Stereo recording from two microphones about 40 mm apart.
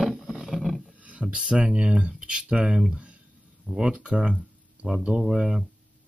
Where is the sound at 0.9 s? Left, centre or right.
Right.